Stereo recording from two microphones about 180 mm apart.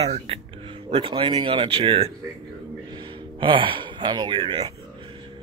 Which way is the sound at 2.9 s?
25° right (ahead or behind).